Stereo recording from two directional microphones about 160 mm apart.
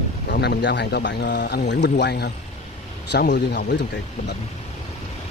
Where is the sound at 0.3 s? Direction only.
85° left.